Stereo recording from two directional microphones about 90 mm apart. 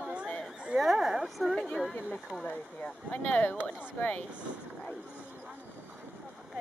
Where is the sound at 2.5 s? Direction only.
15° left (ahead or behind).